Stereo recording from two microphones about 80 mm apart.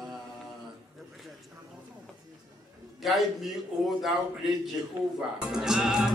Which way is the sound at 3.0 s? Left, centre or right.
Centre.